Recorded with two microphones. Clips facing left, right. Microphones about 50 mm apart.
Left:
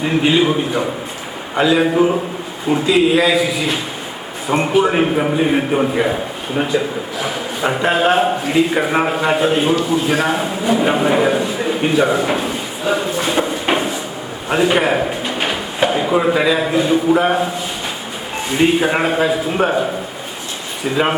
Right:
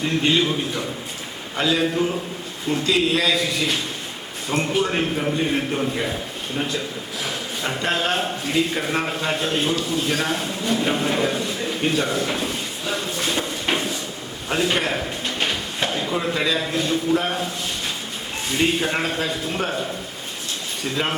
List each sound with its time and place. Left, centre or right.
0.0 s a man's voice: centre
2.6 s a man's voice: centre
18.5 s speech: centre
20.8 s speech: centre